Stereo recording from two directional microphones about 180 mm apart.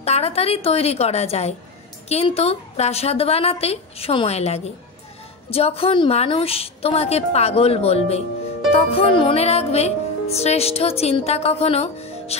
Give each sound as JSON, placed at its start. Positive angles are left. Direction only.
{"t": 0.0, "sound": "music", "side_deg": 35}